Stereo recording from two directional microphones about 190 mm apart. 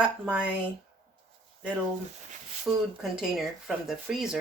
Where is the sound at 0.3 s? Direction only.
5° right (ahead or behind).